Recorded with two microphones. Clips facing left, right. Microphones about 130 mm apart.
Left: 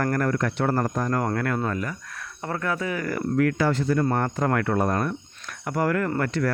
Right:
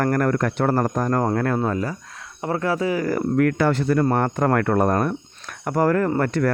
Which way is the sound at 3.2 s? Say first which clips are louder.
Right 1 dB; 50° right (ahead or behind).